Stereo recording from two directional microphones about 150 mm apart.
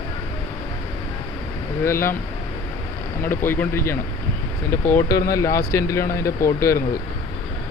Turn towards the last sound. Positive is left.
turn(degrees=20)  # may be behind; listen again after turning